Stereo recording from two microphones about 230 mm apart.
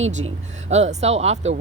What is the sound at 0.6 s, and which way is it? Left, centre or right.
Speech, right.